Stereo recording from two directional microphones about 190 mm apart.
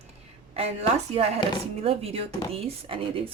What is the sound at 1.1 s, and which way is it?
Speech, 35° right (ahead or behind).